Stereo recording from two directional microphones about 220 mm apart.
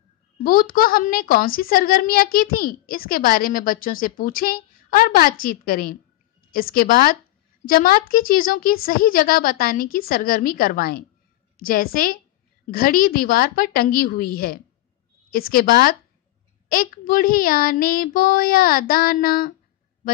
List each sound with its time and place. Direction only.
0.4 s a woman's voice: 40° left (ahead or behind)